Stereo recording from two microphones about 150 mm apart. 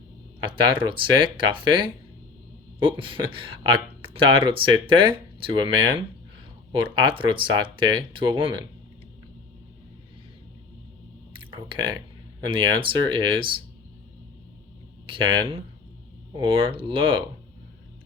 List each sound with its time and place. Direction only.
0.4 s speech: 35° right (ahead or behind)
6.7 s speech: 35° right (ahead or behind)
12.5 s speech: 35° right (ahead or behind)
15.0 s speech: 35° right (ahead or behind)